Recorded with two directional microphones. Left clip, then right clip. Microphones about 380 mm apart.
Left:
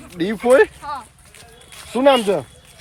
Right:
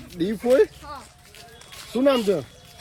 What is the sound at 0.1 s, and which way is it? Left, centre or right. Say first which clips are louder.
Speech: left 4 dB; centre.